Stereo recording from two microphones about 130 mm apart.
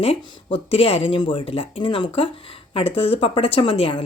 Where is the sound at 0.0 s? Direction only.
50° left (ahead or behind).